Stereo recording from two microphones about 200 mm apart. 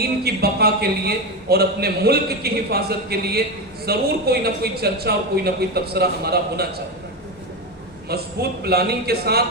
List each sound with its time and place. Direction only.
0.0 s a man's voice: 50° right (ahead or behind)
8.1 s a man's voice: 50° right (ahead or behind)